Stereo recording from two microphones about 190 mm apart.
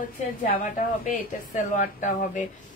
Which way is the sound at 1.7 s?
40° left (ahead or behind).